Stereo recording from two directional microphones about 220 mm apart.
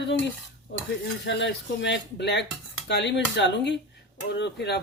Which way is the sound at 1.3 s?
50° left (ahead or behind).